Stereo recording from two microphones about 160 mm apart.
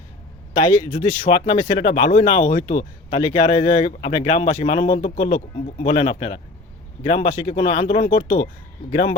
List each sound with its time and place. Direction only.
0.9 s speech: 50° left (ahead or behind)
1.5 s speech: 30° left (ahead or behind)